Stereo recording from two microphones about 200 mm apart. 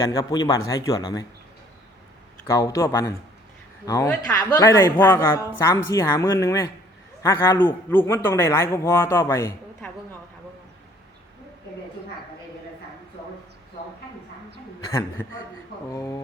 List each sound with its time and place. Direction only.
0.0 s speech: 15° left (ahead or behind)
2.5 s speech: 15° left (ahead or behind)
15.9 s speech: 15° left (ahead or behind)